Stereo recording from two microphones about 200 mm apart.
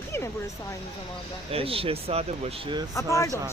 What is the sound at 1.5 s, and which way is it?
Speech, 30° right (ahead or behind).